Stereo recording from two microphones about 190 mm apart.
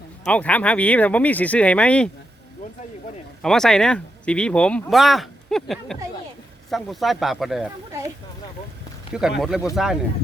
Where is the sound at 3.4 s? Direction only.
5° left (ahead or behind).